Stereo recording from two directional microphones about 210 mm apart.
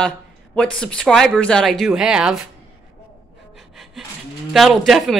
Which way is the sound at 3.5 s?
Centre (ahead or behind).